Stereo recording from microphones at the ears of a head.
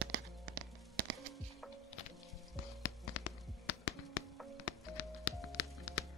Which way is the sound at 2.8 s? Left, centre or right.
Left.